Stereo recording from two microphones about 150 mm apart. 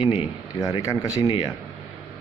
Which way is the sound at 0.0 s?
35° left (ahead or behind).